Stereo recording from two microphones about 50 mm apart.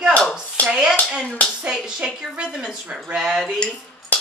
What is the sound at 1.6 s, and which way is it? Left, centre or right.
Speech, centre.